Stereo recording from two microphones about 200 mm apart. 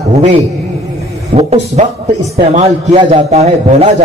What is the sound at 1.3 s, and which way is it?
A man's voice, 30° right (ahead or behind).